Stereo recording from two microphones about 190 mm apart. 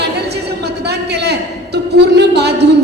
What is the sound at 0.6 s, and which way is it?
A man's voice, 60° right (ahead or behind).